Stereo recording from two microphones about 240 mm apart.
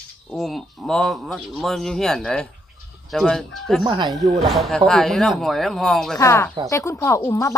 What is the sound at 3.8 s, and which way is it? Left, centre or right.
Speech, centre.